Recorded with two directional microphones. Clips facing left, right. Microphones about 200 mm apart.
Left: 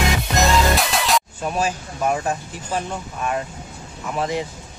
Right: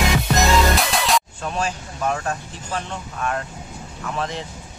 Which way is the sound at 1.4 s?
10° left (ahead or behind).